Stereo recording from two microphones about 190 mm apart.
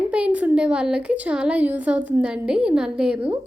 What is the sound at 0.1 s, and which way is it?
A woman's voice, 5° right (ahead or behind).